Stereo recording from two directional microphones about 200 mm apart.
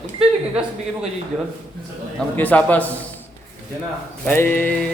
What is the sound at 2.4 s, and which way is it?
Speech, 10° left (ahead or behind).